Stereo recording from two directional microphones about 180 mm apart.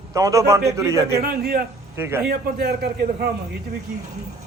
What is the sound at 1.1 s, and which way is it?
Speech, 60° right (ahead or behind).